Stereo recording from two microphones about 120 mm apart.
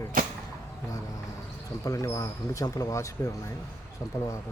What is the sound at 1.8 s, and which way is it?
Speech, 25° left (ahead or behind).